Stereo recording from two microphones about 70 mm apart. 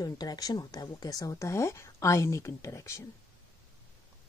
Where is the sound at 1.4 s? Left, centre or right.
Left.